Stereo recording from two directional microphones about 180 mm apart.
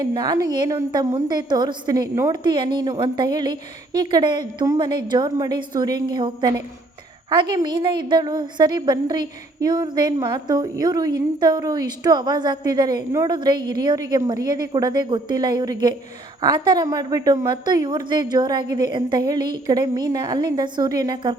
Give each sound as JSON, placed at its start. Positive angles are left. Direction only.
{"t": 0.0, "sound": "a woman's voice", "side_deg": -20}